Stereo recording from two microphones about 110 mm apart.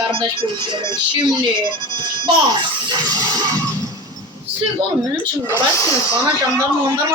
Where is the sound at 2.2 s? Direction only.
40° right (ahead or behind).